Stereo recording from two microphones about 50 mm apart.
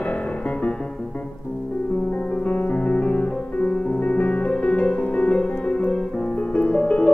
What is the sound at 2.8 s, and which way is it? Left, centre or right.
Piano, left.